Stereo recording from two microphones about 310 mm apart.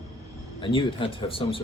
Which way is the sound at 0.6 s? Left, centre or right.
Centre.